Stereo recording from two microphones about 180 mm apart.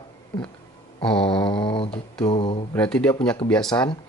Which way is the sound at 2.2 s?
30° left (ahead or behind).